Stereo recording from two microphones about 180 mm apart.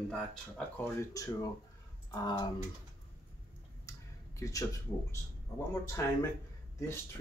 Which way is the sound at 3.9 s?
20° left (ahead or behind).